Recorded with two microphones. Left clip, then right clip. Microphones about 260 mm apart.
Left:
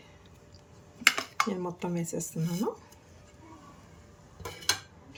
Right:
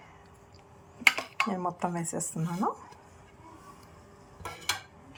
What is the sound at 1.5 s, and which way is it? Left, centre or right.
A woman's voice, centre.